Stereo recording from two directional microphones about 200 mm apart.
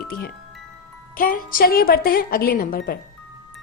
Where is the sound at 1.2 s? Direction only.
45° left (ahead or behind).